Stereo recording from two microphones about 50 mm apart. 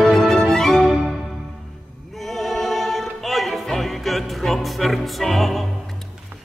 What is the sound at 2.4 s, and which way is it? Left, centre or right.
Music, centre.